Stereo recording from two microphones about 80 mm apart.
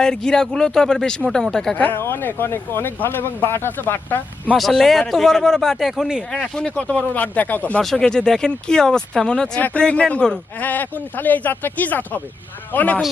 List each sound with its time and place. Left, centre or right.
0.0 s speech: centre
1.8 s speech: left
4.5 s a man's voice: centre
6.3 s speech: centre
7.8 s speech: centre; by 13.0 s left